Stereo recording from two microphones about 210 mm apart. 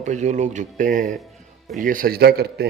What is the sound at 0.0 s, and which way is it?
Speech, 35° right (ahead or behind).